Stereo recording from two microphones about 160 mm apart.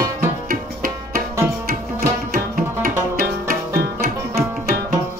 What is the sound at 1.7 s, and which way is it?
Tabla, 65° right (ahead or behind).